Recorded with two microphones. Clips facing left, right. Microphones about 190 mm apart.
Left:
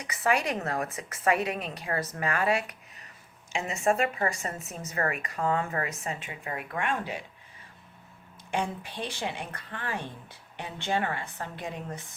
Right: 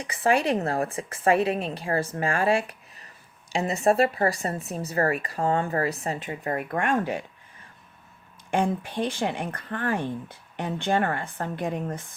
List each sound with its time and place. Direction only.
0.0 s speech: 30° right (ahead or behind); by 7.3 s 50° right (ahead or behind)
8.4 s speech: 50° right (ahead or behind)